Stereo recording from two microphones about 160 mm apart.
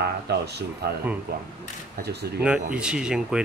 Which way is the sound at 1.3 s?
75° right (ahead or behind).